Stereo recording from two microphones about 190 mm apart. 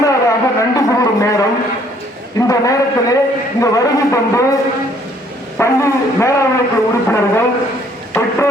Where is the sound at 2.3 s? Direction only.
20° left (ahead or behind).